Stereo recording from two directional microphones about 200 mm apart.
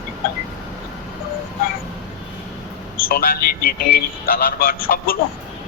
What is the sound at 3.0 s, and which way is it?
A man's voice, 45° left (ahead or behind).